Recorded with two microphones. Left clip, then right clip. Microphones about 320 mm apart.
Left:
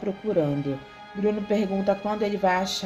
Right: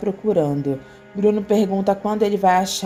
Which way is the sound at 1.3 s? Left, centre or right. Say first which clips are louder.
Right 7 dB; centre.